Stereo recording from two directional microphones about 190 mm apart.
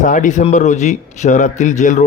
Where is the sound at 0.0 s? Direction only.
40° left (ahead or behind).